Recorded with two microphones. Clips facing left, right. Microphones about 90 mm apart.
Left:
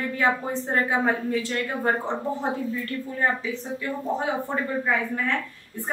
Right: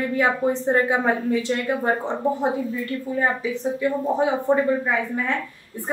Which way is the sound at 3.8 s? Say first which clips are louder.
Right 7 dB; 20° right (ahead or behind).